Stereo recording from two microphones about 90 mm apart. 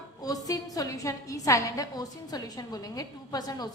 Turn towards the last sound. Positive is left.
turn(degrees=45)  # may be behind; listen again after turning